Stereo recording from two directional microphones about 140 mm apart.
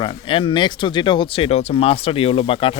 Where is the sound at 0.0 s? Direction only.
40° left (ahead or behind).